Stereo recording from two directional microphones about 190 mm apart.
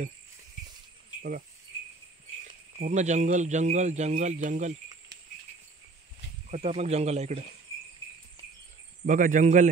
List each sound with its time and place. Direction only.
2.8 s speech: 40° right (ahead or behind)
6.5 s speech: 35° right (ahead or behind)
9.0 s speech: 45° right (ahead or behind)